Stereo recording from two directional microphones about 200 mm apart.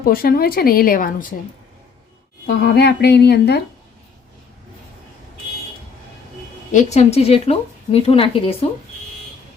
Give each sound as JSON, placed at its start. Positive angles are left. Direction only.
{"t": 0.0, "sound": "a woman's voice", "side_deg": 50}
{"t": 2.6, "sound": "speech", "side_deg": 55}
{"t": 6.7, "sound": "a woman's voice", "side_deg": 35}